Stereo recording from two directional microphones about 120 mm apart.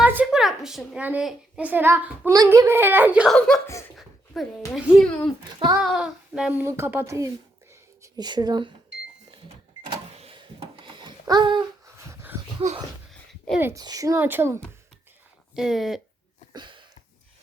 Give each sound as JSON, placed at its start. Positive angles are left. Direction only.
{"t": 0.0, "sound": "a sound", "side_deg": -10}
{"t": 0.9, "sound": "speech", "side_deg": -10}
{"t": 2.3, "sound": "speech", "side_deg": -30}
{"t": 3.2, "sound": "speech", "side_deg": 5}
{"t": 10.2, "sound": "a sound", "side_deg": -55}
{"t": 12.0, "sound": "dog", "side_deg": -20}
{"t": 12.6, "sound": "speech", "side_deg": -70}
{"t": 13.7, "sound": "speech", "side_deg": -30}
{"t": 15.5, "sound": "speech", "side_deg": -5}
{"t": 16.5, "sound": "a sound", "side_deg": -40}